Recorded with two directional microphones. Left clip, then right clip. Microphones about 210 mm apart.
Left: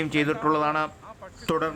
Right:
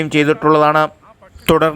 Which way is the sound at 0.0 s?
30° right (ahead or behind).